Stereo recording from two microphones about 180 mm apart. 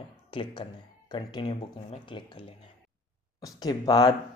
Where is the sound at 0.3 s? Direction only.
25° left (ahead or behind).